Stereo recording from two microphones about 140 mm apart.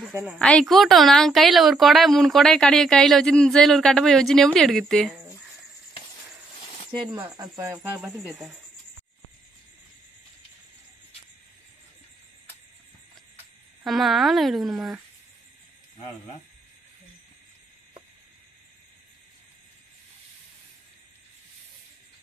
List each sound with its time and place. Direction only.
0.0 s speech: 10° right (ahead or behind)
0.4 s a woman's voice: 5° left (ahead or behind)
7.2 s speech: 30° right (ahead or behind)
7.7 s a woman's voice: centre (ahead or behind)
13.8 s a woman's voice: centre (ahead or behind)